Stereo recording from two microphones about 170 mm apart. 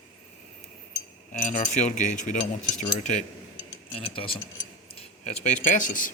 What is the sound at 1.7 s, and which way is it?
Speech, 45° left (ahead or behind).